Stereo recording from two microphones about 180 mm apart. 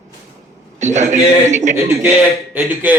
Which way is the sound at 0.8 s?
40° right (ahead or behind).